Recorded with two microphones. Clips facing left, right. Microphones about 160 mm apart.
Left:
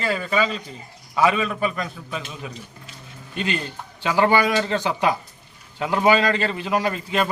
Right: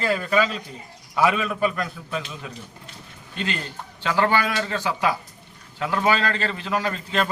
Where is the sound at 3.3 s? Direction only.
15° left (ahead or behind).